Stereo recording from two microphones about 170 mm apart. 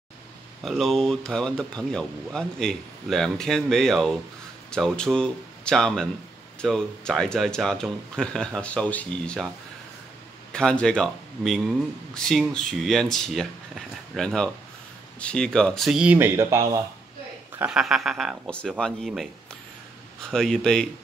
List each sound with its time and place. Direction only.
0.7 s speech: centre (ahead or behind)
10.5 s a man's voice: 5° left (ahead or behind); by 16.8 s 15° right (ahead or behind)
17.6 s speech: 5° right (ahead or behind)
20.2 s speech: 5° left (ahead or behind)